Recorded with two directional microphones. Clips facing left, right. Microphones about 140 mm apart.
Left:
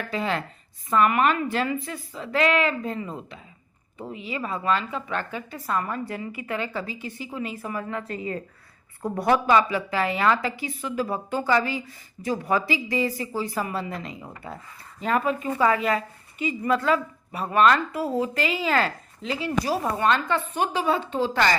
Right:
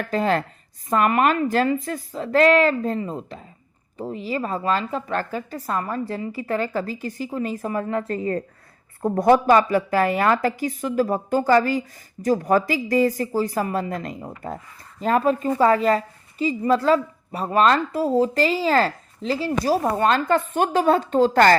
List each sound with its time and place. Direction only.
0.1 s a woman's voice: 40° right (ahead or behind)
9.0 s a woman's voice: 25° right (ahead or behind)
9.5 s a woman's voice: 45° right (ahead or behind)